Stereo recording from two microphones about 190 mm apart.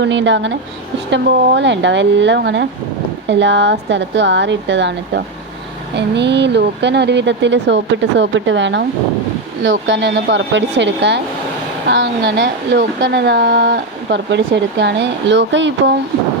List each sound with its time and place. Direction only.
0.0 s speech: 70° right (ahead or behind)